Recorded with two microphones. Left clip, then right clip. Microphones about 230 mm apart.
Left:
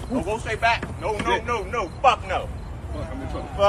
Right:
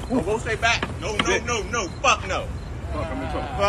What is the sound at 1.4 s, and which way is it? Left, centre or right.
Speech, left.